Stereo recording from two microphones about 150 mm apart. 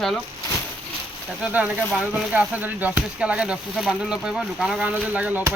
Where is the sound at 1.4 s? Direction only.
10° right (ahead or behind).